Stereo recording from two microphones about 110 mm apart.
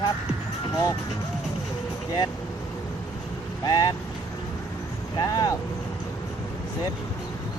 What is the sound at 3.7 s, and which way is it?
Speech, 35° left (ahead or behind).